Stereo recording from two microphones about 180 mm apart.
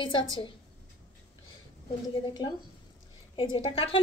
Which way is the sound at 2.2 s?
25° left (ahead or behind).